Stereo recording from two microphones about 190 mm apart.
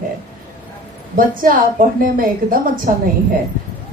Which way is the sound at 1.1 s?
45° right (ahead or behind).